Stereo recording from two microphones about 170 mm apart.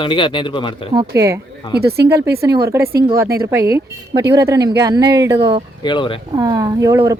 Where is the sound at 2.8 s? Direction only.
60° right (ahead or behind).